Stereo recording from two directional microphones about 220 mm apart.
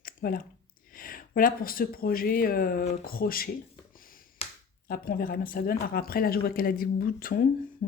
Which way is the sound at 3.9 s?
40° left (ahead or behind).